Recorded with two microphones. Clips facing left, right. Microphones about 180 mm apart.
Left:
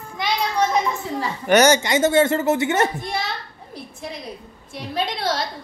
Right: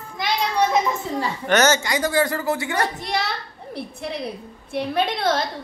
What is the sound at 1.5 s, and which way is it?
Speech, 15° left (ahead or behind).